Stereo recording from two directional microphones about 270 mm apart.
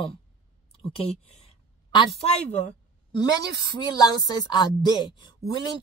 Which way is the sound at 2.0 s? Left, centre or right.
Left.